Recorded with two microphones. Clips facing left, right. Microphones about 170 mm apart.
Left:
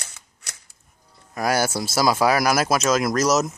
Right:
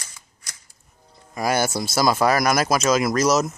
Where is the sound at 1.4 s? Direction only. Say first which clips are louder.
Even; 5° left (ahead or behind).